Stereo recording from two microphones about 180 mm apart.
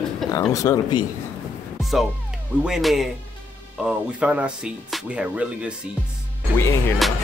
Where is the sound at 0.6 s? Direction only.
20° left (ahead or behind).